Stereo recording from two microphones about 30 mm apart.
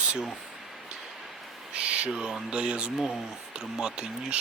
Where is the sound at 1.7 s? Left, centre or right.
Right.